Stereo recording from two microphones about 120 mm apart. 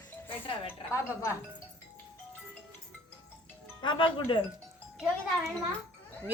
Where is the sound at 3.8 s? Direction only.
40° left (ahead or behind).